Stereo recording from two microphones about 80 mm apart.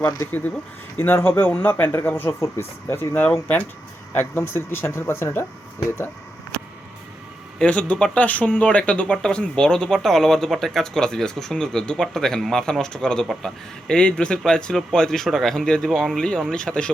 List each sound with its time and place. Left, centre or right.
0.3 s speech: left
7.6 s speech: centre